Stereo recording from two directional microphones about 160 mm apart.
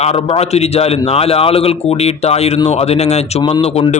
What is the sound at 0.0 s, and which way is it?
Speech, 40° left (ahead or behind).